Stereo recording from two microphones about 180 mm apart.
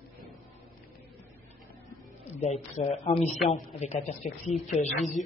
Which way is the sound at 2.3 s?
40° left (ahead or behind).